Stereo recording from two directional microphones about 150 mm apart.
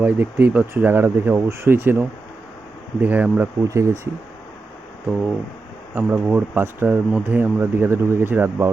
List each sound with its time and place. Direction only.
0.0 s speech: 10° right (ahead or behind)
5.9 s speech: 15° right (ahead or behind)